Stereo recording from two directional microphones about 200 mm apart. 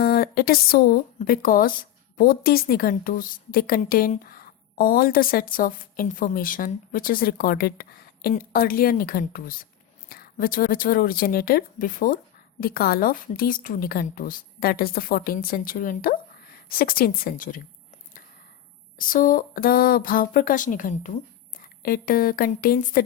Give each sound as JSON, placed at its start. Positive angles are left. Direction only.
{"t": 0.0, "sound": "a woman's voice", "side_deg": 50}
{"t": 18.9, "sound": "a woman's voice", "side_deg": 45}